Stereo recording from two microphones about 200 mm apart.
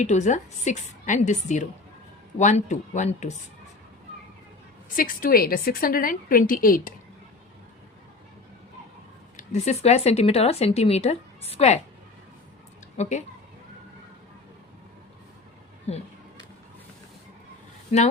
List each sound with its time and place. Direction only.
0.0 s speech: 35° left (ahead or behind)
4.9 s a woman's voice: 45° left (ahead or behind)
9.4 s speech: 35° left (ahead or behind)
13.0 s speech: 35° left (ahead or behind)